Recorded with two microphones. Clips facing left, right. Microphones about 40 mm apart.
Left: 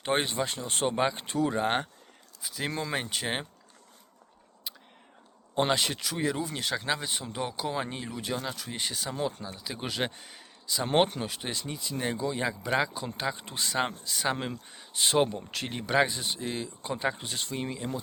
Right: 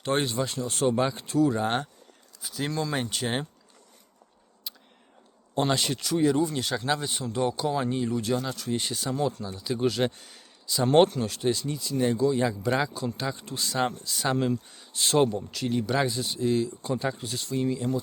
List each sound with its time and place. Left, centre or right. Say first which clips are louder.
0.0 s speech: right 2 dB; left
1.1 s speech: right 4 dB; left
2.4 s speech: right 3 dB; centre
2.6 s speech: right 2 dB; centre
3.0 s speech: right 3 dB; centre
4.7 s a sound: even; centre
5.5 s speech: right 1 dB; centre
8.8 s speech: right 3 dB; centre
9.1 s speech: right 4 dB; centre
15.4 s speech: right 7 dB; left